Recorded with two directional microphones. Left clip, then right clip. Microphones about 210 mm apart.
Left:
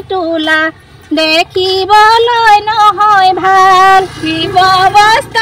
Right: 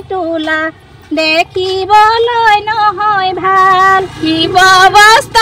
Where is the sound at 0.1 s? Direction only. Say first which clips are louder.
Left 3 dB; 40° left (ahead or behind).